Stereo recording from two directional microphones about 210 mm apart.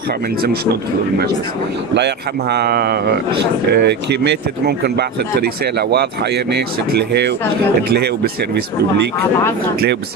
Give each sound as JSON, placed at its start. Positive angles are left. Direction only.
{"t": 2.0, "sound": "speech", "side_deg": -50}